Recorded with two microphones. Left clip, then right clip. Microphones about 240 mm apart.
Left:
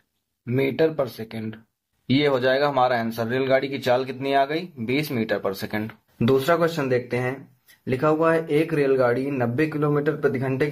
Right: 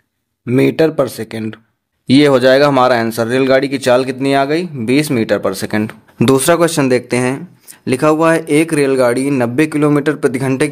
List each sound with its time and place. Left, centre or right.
0.5 s speech: right